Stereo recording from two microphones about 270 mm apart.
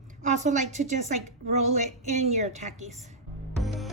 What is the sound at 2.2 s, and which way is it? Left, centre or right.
Speech, right.